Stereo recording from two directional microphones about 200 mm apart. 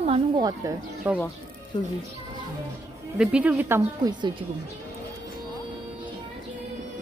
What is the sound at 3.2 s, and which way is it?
Speech, 5° right (ahead or behind).